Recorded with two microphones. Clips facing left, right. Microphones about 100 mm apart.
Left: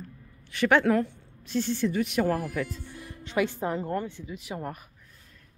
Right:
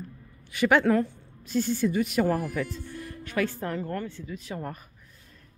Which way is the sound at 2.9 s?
15° left (ahead or behind).